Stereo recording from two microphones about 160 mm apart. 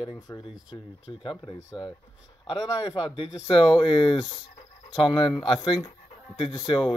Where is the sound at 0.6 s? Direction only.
30° left (ahead or behind).